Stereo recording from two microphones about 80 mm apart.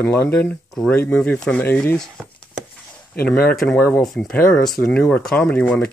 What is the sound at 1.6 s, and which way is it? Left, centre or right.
Speech, left.